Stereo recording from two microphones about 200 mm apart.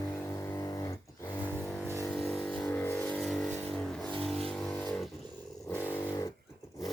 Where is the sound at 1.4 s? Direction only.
10° left (ahead or behind).